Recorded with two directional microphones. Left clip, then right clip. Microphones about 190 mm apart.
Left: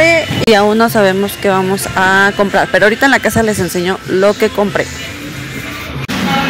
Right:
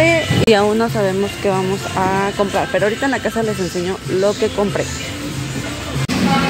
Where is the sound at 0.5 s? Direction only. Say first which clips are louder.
Left 6 dB; 20° left (ahead or behind).